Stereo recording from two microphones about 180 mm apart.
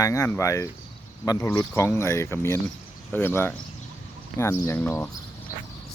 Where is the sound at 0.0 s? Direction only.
20° left (ahead or behind).